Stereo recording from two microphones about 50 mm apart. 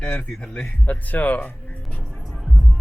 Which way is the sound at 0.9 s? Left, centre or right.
Left.